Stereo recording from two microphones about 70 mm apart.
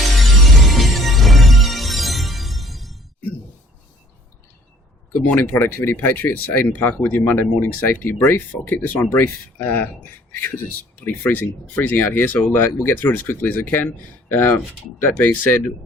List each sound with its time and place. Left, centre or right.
0.2 s music: centre
5.1 s speech: left